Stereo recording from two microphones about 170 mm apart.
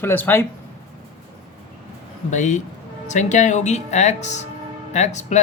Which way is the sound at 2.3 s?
45° left (ahead or behind).